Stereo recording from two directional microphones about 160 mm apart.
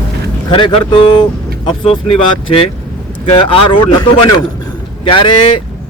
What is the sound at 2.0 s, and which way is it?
Speech, 35° left (ahead or behind).